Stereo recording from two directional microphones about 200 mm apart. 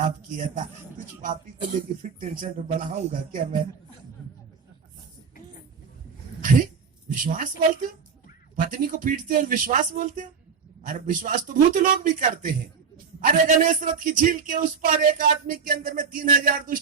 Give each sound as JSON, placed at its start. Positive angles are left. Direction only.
{"t": 0.0, "sound": "a man's voice", "side_deg": -40}
{"t": 7.2, "sound": "a man's voice", "side_deg": -40}